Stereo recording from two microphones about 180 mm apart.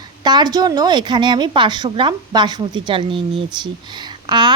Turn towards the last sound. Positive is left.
turn(degrees=-25)  # may be behind; listen again after turning